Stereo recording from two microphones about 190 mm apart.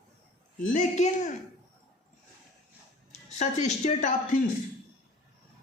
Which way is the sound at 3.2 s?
35° left (ahead or behind).